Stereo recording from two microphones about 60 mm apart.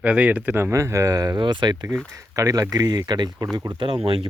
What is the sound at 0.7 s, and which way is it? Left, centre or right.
Speech, right.